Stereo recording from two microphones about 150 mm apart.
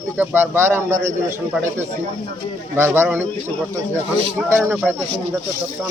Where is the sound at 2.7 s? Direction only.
15° right (ahead or behind).